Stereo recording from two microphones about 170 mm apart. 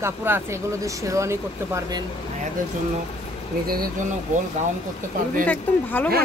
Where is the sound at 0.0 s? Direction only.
15° right (ahead or behind).